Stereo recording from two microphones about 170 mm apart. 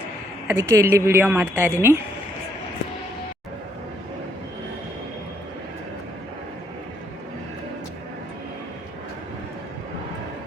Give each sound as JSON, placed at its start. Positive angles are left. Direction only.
{"t": 0.4, "sound": "a woman's voice", "side_deg": -15}